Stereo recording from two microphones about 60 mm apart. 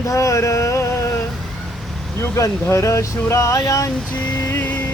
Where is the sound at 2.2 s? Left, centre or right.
Left.